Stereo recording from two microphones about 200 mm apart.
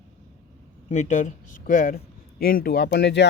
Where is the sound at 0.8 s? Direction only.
35° left (ahead or behind).